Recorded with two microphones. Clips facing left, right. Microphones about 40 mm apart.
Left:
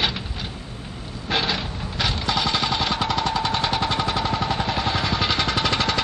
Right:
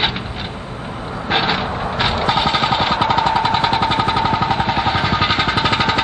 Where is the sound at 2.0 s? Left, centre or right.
Right.